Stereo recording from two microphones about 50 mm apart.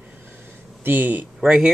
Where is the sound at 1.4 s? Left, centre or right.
Centre.